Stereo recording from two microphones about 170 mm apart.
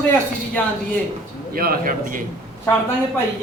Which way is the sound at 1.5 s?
55° right (ahead or behind).